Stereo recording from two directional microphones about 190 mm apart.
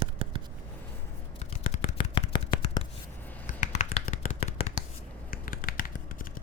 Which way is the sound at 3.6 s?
40° left (ahead or behind).